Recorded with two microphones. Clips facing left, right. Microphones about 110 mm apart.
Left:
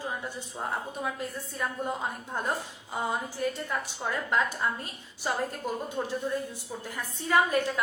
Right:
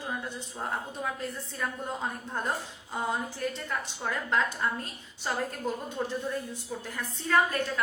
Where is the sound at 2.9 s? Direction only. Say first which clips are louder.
Even; 10° left (ahead or behind).